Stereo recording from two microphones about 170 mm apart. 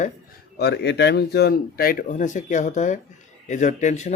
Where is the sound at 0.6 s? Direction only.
85° left.